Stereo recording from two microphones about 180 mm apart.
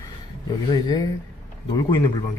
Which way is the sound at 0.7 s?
20° left (ahead or behind).